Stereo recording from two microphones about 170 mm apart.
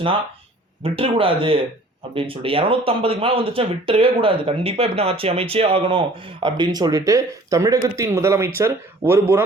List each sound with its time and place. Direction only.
0.8 s speech: 35° right (ahead or behind); by 9.4 s 15° right (ahead or behind)